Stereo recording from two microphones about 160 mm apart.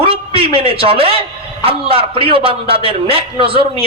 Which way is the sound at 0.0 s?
35° right (ahead or behind).